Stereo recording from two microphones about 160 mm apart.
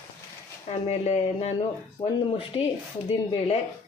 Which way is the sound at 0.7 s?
40° left (ahead or behind).